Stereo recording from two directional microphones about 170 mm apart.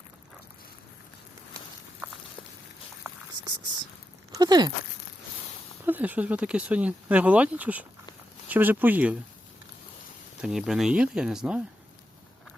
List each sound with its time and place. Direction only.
3.0 s a sound: 25° right (ahead or behind)
4.3 s speech: 25° right (ahead or behind)
5.8 s speech: 10° right (ahead or behind)
10.4 s speech: 5° right (ahead or behind)